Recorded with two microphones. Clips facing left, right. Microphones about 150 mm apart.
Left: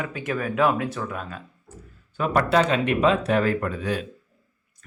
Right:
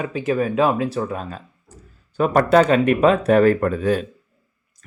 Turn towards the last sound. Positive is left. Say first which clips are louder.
# right 7 dB
turn(degrees=-45)  # may be behind; listen again after turning